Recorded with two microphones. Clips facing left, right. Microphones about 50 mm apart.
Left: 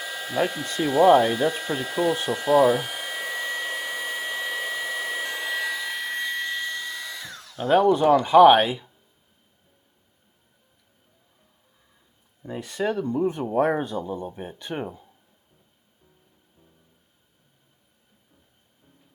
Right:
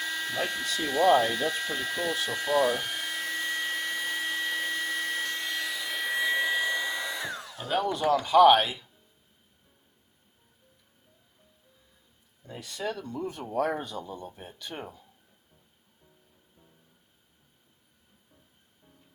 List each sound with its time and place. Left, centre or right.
0.0 s hair dryer: centre
0.8 s speech: centre
2.3 s hair dryer: centre
7.7 s speech: left
12.5 s speech: left